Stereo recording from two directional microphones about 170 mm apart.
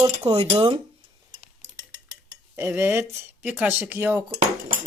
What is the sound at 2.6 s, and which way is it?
Speech, 15° right (ahead or behind).